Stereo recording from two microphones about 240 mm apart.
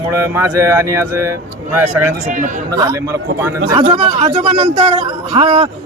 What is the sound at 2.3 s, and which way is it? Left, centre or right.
Speech, right.